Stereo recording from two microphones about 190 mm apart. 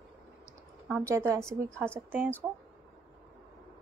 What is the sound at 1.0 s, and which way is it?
A woman's voice, 15° right (ahead or behind).